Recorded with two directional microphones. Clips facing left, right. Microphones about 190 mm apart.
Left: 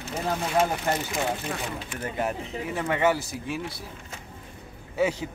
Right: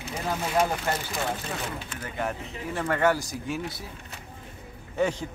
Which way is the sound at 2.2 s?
10° left (ahead or behind).